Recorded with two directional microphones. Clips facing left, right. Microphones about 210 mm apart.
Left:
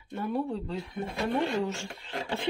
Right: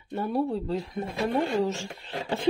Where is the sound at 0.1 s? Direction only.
40° right (ahead or behind).